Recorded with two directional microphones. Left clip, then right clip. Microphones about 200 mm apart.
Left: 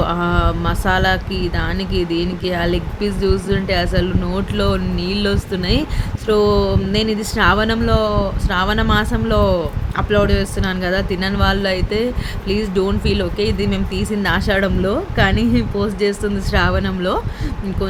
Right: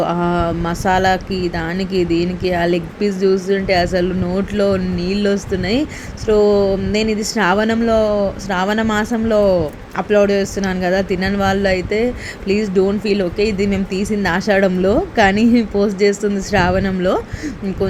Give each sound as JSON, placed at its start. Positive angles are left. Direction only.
{"t": 0.0, "sound": "speech", "side_deg": -5}
{"t": 4.9, "sound": "speech", "side_deg": -35}
{"t": 5.2, "sound": "speech", "side_deg": -5}
{"t": 13.1, "sound": "speech", "side_deg": -5}